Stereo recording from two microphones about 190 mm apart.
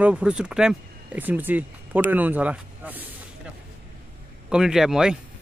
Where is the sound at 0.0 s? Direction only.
5° right (ahead or behind).